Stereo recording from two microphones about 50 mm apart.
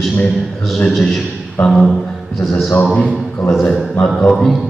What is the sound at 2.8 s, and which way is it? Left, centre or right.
Speech, centre.